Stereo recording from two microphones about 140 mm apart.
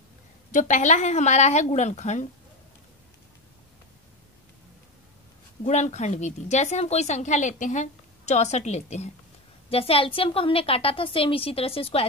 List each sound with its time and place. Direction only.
0.5 s a woman's voice: 65° left (ahead or behind)
5.6 s a woman's voice: 55° left (ahead or behind)
9.7 s a woman's voice: 45° left (ahead or behind)